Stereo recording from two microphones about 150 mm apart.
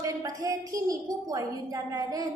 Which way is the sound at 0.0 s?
25° right (ahead or behind).